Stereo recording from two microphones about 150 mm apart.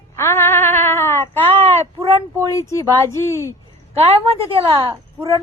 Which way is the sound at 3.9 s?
40° right (ahead or behind).